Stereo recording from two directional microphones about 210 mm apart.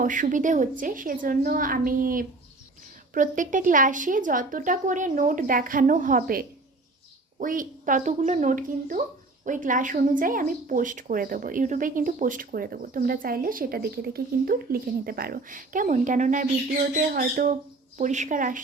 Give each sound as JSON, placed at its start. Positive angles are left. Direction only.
{"t": 0.0, "sound": "speech", "side_deg": -40}